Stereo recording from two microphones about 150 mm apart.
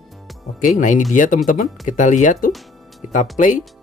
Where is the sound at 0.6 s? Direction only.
55° left (ahead or behind).